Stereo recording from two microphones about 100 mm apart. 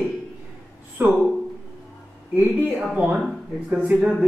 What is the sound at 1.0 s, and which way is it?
Speech, 20° right (ahead or behind).